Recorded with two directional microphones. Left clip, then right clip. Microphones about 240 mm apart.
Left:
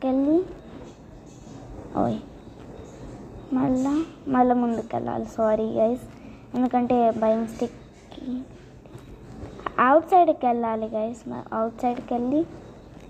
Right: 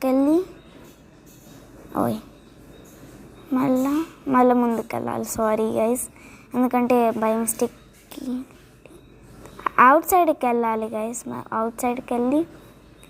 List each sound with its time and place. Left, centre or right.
0.0 s a woman's voice: right
1.9 s speech: right
3.5 s a woman's voice: right
9.6 s a woman's voice: right